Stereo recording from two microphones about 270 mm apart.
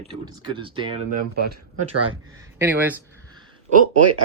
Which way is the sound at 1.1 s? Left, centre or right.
Right.